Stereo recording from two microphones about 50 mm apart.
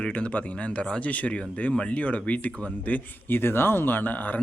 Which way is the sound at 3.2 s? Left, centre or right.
Left.